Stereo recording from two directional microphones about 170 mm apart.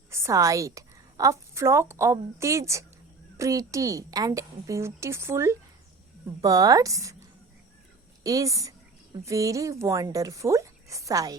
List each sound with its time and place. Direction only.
0.1 s a woman's voice: 15° right (ahead or behind)
8.2 s speech: 20° right (ahead or behind)